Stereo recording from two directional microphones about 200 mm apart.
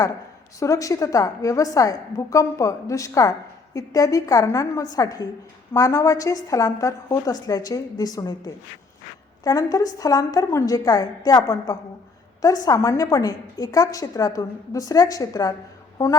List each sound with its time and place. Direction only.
0.6 s a woman's voice: 15° left (ahead or behind)